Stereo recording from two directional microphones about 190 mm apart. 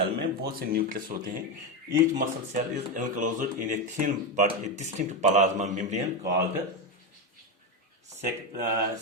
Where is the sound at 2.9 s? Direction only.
45° right (ahead or behind).